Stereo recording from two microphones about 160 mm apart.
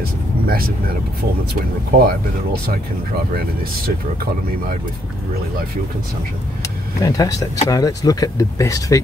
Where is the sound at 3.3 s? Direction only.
70° right (ahead or behind).